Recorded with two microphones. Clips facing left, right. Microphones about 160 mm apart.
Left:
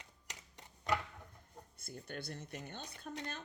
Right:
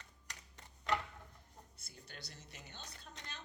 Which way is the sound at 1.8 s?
50° left (ahead or behind).